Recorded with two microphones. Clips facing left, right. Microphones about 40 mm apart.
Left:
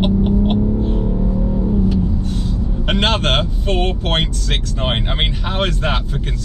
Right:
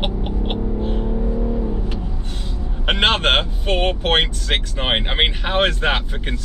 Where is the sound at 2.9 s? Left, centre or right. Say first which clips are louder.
Right 1 dB; centre.